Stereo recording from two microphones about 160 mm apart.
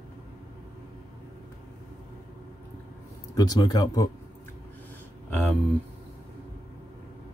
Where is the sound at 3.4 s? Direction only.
25° left (ahead or behind).